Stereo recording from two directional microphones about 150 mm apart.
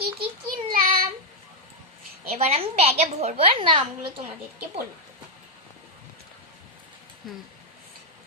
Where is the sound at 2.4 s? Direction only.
45° right (ahead or behind).